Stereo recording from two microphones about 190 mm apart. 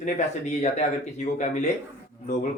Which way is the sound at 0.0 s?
40° left (ahead or behind).